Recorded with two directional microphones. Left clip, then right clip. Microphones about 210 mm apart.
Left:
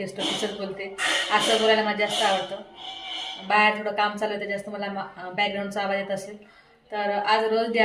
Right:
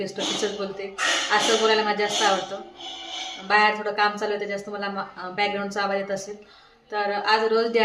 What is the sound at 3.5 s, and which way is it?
Speech, 15° right (ahead or behind).